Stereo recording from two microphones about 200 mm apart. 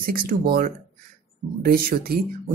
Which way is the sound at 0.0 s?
45° right (ahead or behind).